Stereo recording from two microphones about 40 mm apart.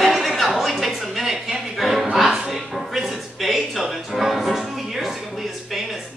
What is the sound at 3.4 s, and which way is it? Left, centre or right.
Music, centre.